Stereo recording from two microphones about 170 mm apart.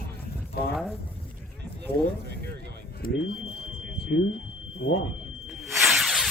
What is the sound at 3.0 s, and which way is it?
Speech, 60° left (ahead or behind).